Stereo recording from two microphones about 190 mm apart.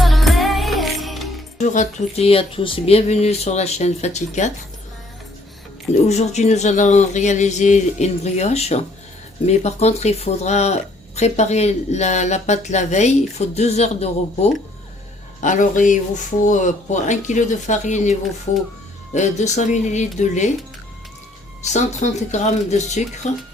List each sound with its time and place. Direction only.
0.0 s music: centre (ahead or behind)
1.5 s speech: 40° left (ahead or behind)
5.9 s speech: 35° left (ahead or behind)
21.7 s speech: 40° left (ahead or behind)